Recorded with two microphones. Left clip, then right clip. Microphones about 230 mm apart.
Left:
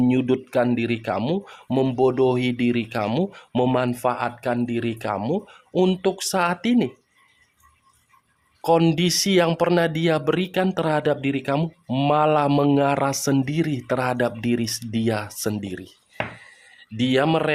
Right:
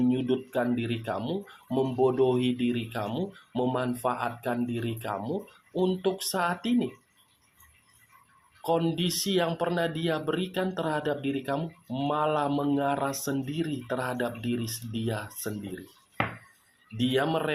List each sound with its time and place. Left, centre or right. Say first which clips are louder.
0.0 s speech: left 6 dB; left
8.6 s speech: left 8 dB; left
17.0 s speech: left 7 dB; left